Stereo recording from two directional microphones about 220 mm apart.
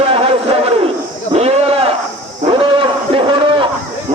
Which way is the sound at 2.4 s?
25° right (ahead or behind).